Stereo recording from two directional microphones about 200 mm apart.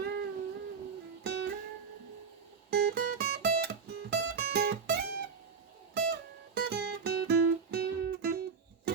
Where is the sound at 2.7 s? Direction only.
50° right (ahead or behind).